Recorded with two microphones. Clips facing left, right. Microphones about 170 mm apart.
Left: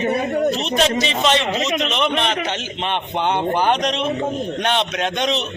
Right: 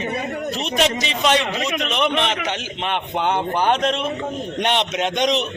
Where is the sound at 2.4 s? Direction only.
10° right (ahead or behind).